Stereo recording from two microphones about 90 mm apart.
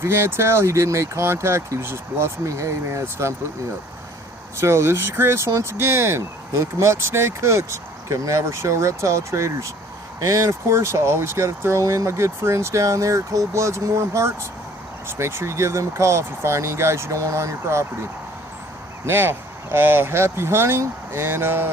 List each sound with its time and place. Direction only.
0.0 s speech: 30° right (ahead or behind)
4.6 s speech: 30° right (ahead or behind)
19.0 s speech: 25° right (ahead or behind)